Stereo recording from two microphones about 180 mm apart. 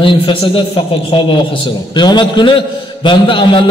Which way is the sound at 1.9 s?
25° left (ahead or behind).